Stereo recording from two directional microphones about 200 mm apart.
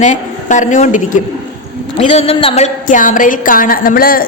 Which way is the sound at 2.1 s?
30° left (ahead or behind).